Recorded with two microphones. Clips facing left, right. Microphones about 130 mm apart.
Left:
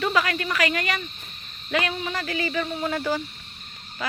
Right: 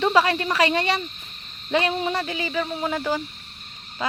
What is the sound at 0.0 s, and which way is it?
Speech, 30° right (ahead or behind).